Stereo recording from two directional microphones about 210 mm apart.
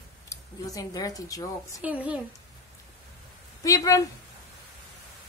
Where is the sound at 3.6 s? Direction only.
15° left (ahead or behind).